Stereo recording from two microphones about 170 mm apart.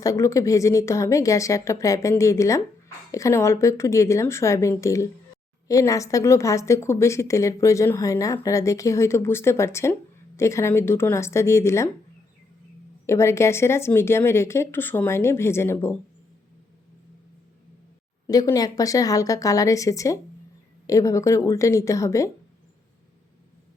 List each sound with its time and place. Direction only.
0.0 s a woman's voice: 20° left (ahead or behind)
13.1 s a woman's voice: 15° left (ahead or behind)
18.3 s a woman's voice: 20° left (ahead or behind)